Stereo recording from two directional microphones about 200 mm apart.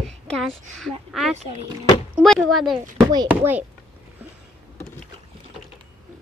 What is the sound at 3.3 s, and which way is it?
Speech, 10° right (ahead or behind).